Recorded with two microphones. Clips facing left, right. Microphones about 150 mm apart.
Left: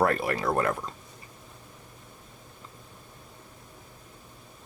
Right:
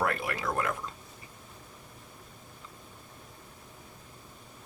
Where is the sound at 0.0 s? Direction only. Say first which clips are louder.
Left 6 dB; 40° left (ahead or behind).